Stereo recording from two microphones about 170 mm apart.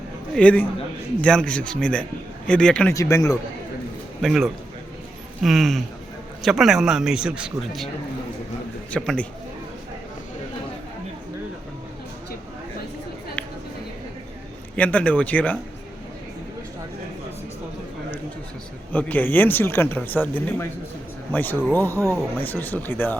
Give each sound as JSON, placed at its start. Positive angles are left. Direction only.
{"t": 0.3, "sound": "a man's voice", "side_deg": 10}
{"t": 2.9, "sound": "speech", "side_deg": 20}
{"t": 4.2, "sound": "a man's voice", "side_deg": 0}
{"t": 8.9, "sound": "a man's voice", "side_deg": 5}
{"t": 14.8, "sound": "speech", "side_deg": 10}
{"t": 18.9, "sound": "speech", "side_deg": 10}